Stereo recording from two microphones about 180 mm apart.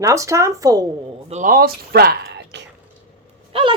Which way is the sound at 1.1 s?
40° right (ahead or behind).